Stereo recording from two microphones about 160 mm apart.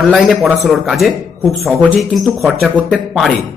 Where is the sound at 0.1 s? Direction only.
Centre (ahead or behind).